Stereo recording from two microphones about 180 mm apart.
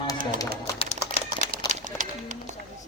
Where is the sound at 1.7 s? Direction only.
40° right (ahead or behind).